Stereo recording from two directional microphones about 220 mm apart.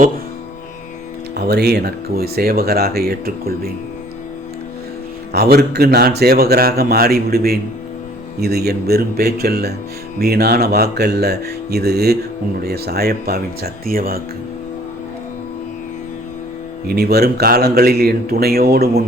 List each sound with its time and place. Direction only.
1.4 s speech: 45° right (ahead or behind)
5.3 s speech: 45° right (ahead or behind)
16.9 s speech: 45° right (ahead or behind)